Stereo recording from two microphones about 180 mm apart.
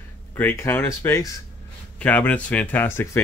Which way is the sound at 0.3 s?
10° left (ahead or behind).